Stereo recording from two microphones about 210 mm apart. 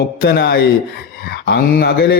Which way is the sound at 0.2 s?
45° left (ahead or behind).